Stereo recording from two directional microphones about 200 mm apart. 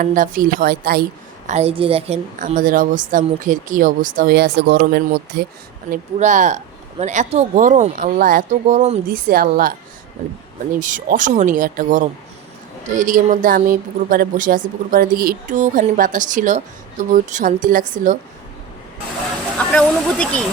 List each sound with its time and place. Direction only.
0.0 s a woman's voice: 45° right (ahead or behind)
1.5 s a woman's voice: 30° right (ahead or behind); by 5.5 s 55° right (ahead or behind)
5.9 s a woman's voice: 40° right (ahead or behind)
10.8 s a woman's voice: 40° right (ahead or behind)
19.5 s speech: 5° left (ahead or behind)